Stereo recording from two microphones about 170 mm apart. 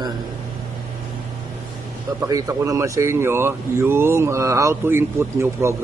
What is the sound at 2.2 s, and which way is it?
Speech, 20° right (ahead or behind).